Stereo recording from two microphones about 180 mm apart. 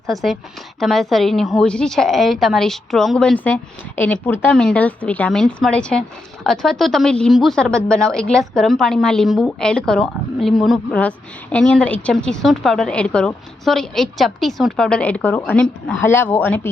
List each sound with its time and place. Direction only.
0.1 s a woman's voice: centre (ahead or behind)